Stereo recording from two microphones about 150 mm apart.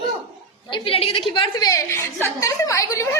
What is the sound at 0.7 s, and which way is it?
A woman's voice, 40° left (ahead or behind).